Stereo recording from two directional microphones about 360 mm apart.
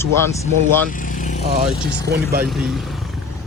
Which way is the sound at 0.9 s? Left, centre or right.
Left.